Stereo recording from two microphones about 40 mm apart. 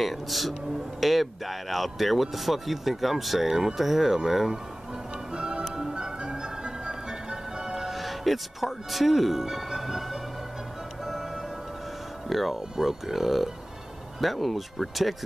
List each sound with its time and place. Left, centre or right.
0.0 s speech: centre
5.3 s music: right
7.8 s speech: centre
12.3 s speech: centre